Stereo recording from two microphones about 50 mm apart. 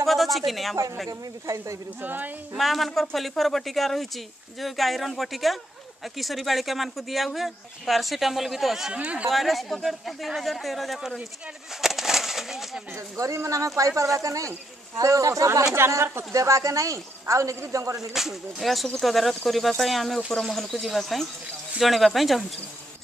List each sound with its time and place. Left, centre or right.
0.0 s speech: centre
2.0 s speech: right
2.5 s speech: centre
8.9 s speech: right
9.3 s speech: centre
11.7 s bird: centre
13.1 s speech: right
15.7 s speech: right
17.6 s speech: right
18.1 s speech: centre